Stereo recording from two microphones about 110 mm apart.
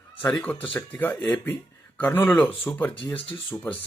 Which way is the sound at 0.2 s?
15° left (ahead or behind).